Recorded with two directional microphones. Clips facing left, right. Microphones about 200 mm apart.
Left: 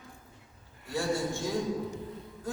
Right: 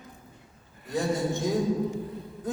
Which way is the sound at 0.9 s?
20° right (ahead or behind).